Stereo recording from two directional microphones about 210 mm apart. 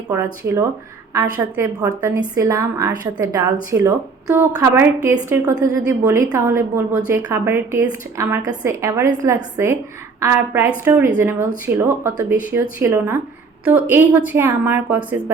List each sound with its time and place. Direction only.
0.1 s a woman's voice: 10° right (ahead or behind)